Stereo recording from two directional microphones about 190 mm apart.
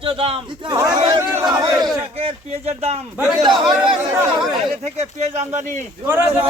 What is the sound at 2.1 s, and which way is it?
Speech, 35° right (ahead or behind).